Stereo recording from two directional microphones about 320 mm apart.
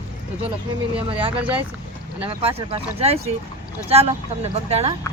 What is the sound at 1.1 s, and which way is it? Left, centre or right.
Speech, centre.